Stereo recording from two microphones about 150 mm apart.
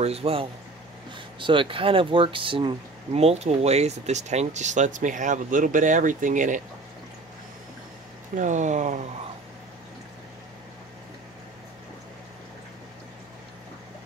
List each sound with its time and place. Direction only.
0.0 s speech: 40° right (ahead or behind); by 6.6 s 60° right (ahead or behind)
8.4 s speech: 55° right (ahead or behind)